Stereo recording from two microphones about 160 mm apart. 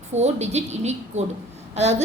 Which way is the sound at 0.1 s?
45° right (ahead or behind).